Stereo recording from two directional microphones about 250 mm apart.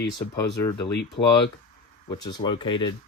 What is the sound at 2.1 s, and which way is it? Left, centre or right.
Speech, centre.